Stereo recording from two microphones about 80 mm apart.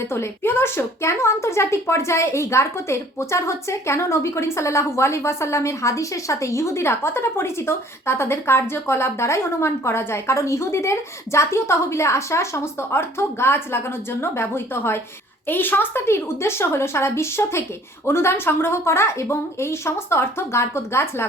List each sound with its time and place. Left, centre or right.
0.1 s a woman's voice: left